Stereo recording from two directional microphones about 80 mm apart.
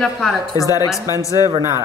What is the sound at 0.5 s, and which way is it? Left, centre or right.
Speech, left.